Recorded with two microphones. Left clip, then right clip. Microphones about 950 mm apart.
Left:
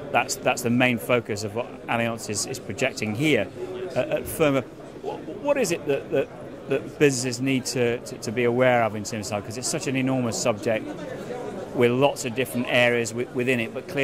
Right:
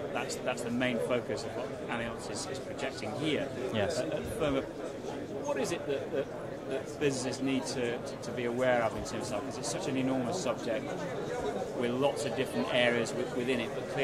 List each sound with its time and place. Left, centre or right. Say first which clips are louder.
0.1 s speech: left 15 dB; left
4.4 s speech: left 10 dB; left
11.8 s speech: left 11 dB; left